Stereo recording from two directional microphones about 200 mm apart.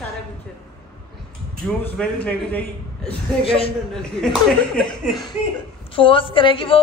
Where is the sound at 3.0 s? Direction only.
25° left (ahead or behind).